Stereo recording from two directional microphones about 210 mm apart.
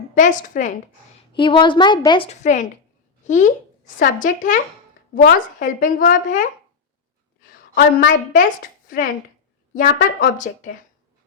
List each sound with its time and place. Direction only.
0.1 s speech: 35° left (ahead or behind)
1.4 s a woman's voice: 25° left (ahead or behind); by 6.5 s 40° left (ahead or behind)
7.8 s speech: 40° left (ahead or behind)